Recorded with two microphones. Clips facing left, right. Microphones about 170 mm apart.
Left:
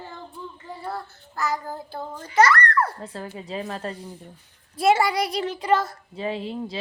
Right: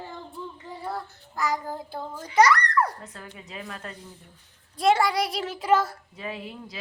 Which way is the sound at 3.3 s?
30° left (ahead or behind).